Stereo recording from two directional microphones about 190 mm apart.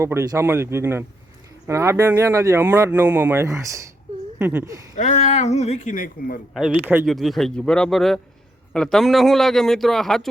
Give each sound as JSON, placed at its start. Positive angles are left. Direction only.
{"t": 0.0, "sound": "speech", "side_deg": -15}
{"t": 4.9, "sound": "speech", "side_deg": 35}
{"t": 6.5, "sound": "a man's voice", "side_deg": -5}
{"t": 7.0, "sound": "a man's voice", "side_deg": 0}